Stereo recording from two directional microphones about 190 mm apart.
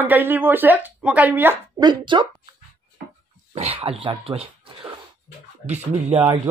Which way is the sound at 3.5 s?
35° right (ahead or behind).